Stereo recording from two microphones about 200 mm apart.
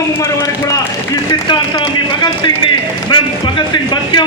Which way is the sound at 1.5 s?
25° left (ahead or behind).